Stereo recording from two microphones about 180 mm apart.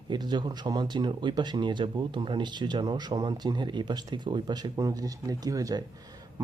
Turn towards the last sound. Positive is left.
turn(degrees=-15)  # may be behind; listen again after turning